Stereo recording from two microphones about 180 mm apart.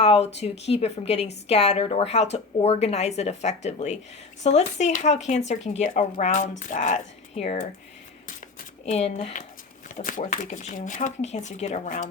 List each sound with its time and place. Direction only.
0.0 s a woman's voice: 35° left (ahead or behind)
8.9 s a woman's voice: 35° left (ahead or behind)
9.9 s speech: 45° left (ahead or behind)